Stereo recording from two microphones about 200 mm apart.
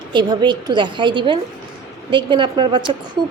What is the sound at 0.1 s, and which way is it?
A woman's voice, 20° right (ahead or behind).